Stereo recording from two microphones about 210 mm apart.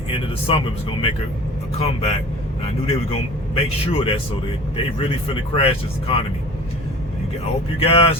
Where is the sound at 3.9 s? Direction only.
25° left (ahead or behind).